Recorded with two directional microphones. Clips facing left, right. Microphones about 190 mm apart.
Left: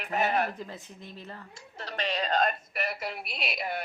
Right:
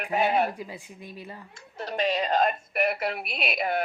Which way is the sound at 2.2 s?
5° right (ahead or behind).